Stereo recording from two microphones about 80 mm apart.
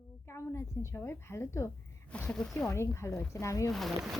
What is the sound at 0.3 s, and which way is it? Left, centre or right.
A woman's voice, left.